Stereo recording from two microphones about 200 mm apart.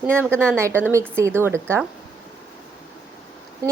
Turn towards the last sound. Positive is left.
turn(degrees=-15)  # may be behind; listen again after turning